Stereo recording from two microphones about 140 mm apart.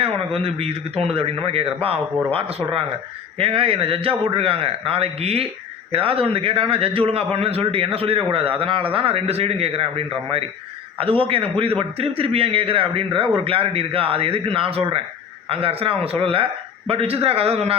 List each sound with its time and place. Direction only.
0.4 s a man's voice: 45° right (ahead or behind)